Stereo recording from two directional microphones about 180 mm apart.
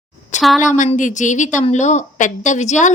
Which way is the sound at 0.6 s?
45° left (ahead or behind).